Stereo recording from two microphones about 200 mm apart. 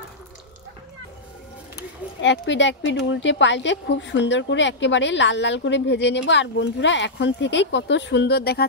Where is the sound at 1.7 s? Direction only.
60° left (ahead or behind).